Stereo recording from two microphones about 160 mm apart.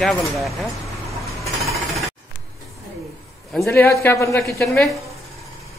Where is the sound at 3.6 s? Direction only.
15° left (ahead or behind).